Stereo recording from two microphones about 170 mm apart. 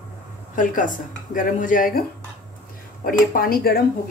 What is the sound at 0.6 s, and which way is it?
Speech, 50° left (ahead or behind).